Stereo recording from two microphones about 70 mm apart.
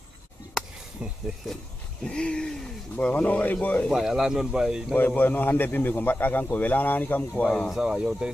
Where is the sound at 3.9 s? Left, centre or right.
Centre.